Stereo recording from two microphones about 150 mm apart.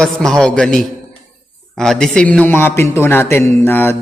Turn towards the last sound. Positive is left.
turn(degrees=15)  # may be behind; listen again after turning